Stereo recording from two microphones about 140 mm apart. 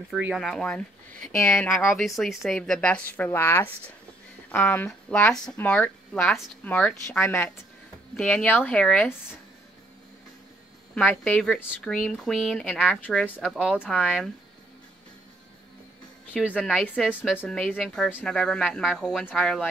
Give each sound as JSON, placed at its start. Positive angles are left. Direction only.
{"t": 0.1, "sound": "speech", "side_deg": -5}
{"t": 1.4, "sound": "speech", "side_deg": 20}
{"t": 1.9, "sound": "speech", "side_deg": 0}
{"t": 5.3, "sound": "speech", "side_deg": 5}
{"t": 11.0, "sound": "speech", "side_deg": 10}
{"t": 16.5, "sound": "speech", "side_deg": 5}